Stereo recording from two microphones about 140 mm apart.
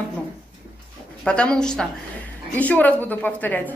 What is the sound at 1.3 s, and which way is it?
A woman's voice, 5° left (ahead or behind).